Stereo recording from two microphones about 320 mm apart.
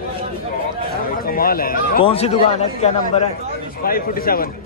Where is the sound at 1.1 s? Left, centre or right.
Left.